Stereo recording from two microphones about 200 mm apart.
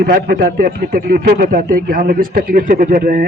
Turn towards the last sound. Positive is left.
turn(degrees=-45)  # may be behind; listen again after turning